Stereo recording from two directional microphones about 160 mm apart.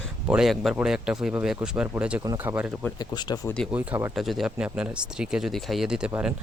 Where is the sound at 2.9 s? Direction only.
25° left (ahead or behind).